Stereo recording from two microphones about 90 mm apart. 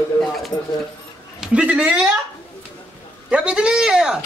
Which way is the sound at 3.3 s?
10° right (ahead or behind).